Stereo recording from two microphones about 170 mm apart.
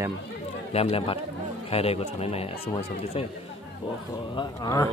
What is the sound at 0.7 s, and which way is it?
Speech, 35° left (ahead or behind).